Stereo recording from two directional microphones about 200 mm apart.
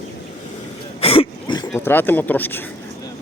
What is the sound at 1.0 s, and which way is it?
Throat clearing, 30° left (ahead or behind).